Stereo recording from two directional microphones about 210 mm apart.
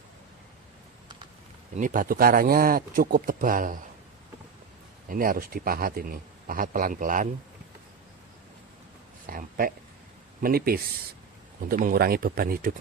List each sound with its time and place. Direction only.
1.7 s speech: 40° right (ahead or behind)
5.0 s a man's voice: 40° right (ahead or behind)
9.2 s a man's voice: 40° right (ahead or behind)